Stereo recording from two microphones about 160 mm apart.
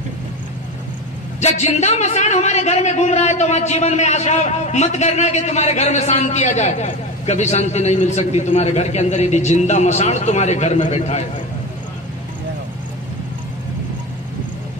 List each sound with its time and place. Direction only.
1.4 s a man's voice: 45° left (ahead or behind)